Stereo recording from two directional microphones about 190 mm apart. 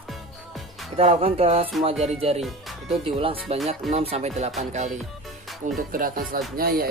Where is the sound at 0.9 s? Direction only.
30° right (ahead or behind).